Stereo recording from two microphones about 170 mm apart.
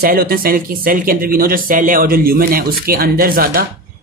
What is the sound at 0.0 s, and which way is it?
Speech, 60° right (ahead or behind).